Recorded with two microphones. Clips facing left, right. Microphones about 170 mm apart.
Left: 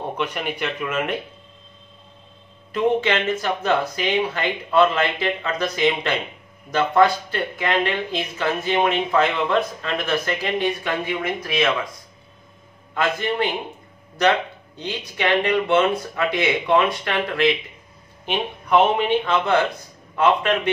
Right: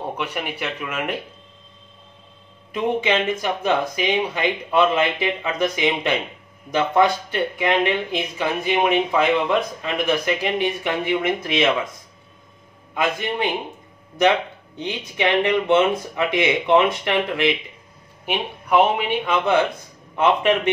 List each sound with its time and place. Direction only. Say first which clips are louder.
0.2 s speech: left 2 dB; 5° right (ahead or behind)
2.7 s speech: left 1 dB; 15° right (ahead or behind)
12.9 s speech: left 1 dB; 15° right (ahead or behind)
14.8 s speech: right 2 dB; 20° right (ahead or behind)